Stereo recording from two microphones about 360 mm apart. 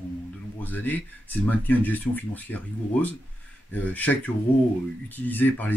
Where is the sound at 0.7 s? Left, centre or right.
Centre.